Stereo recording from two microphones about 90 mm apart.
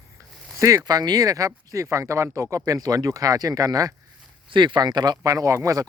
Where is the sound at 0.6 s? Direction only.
40° right (ahead or behind).